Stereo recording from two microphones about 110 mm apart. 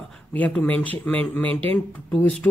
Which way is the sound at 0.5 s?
10° left (ahead or behind).